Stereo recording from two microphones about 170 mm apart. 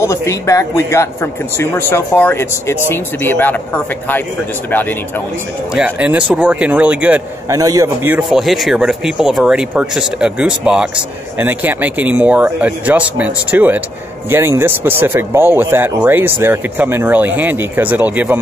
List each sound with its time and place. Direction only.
0.0 s speech: 15° left (ahead or behind)
5.8 s speech: 5° right (ahead or behind)
7.5 s a man's voice: 20° right (ahead or behind)
8.2 s speech: centre (ahead or behind)